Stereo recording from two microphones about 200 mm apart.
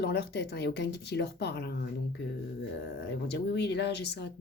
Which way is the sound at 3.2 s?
55° left (ahead or behind).